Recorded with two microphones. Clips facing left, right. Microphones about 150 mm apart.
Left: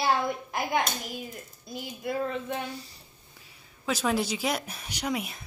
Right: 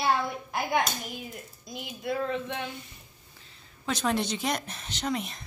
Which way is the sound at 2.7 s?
35° left (ahead or behind).